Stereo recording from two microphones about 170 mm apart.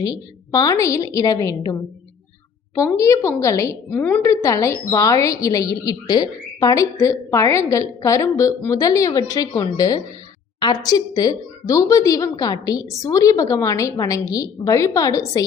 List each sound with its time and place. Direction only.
0.0 s a woman's voice: 20° left (ahead or behind)
2.7 s a woman's voice: 15° left (ahead or behind)